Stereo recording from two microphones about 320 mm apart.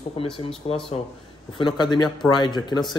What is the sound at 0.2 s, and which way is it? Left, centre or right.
Speech, centre.